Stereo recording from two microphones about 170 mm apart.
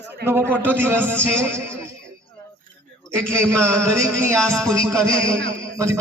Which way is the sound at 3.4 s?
15° right (ahead or behind).